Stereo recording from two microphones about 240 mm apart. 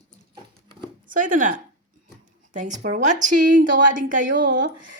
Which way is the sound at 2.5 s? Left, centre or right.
Right.